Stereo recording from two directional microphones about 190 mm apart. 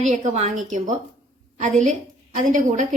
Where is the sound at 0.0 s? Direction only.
40° right (ahead or behind).